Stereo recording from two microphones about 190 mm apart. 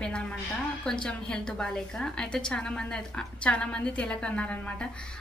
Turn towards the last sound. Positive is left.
turn(degrees=5)  # may be behind; listen again after turning